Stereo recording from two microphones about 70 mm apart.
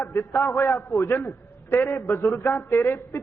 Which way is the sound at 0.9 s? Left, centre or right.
Left.